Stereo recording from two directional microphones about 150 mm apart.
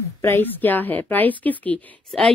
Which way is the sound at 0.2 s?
15° left (ahead or behind).